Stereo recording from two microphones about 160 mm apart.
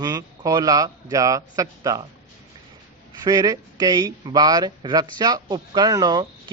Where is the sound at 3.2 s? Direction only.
20° right (ahead or behind).